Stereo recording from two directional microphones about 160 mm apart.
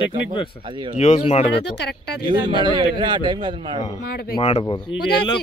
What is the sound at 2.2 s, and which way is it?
A man's voice, 30° right (ahead or behind).